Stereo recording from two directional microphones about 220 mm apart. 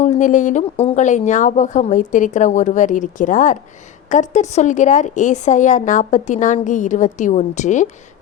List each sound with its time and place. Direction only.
0.0 s a woman's voice: 35° left (ahead or behind)